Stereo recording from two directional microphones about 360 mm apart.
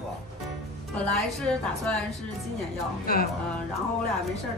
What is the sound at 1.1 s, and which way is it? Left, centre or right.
Speech, centre.